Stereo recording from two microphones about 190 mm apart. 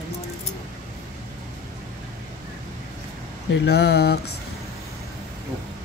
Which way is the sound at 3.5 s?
65° left (ahead or behind).